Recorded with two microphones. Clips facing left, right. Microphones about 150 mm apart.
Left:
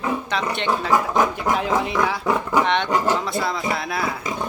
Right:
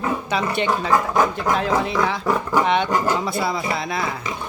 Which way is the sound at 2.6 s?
5° right (ahead or behind).